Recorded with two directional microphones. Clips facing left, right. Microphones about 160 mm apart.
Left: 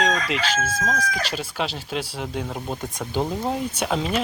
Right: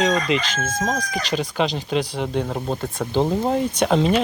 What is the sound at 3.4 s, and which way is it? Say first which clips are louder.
Speech: right 5 dB; 5° left (ahead or behind).